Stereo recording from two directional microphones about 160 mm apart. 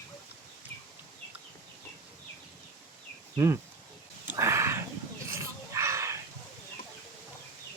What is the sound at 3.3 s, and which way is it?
Speech, 15° right (ahead or behind).